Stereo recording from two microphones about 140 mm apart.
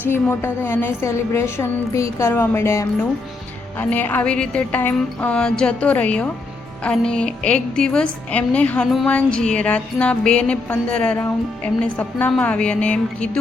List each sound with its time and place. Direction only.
0.1 s a woman's voice: 15° left (ahead or behind)
3.8 s music: 15° left (ahead or behind)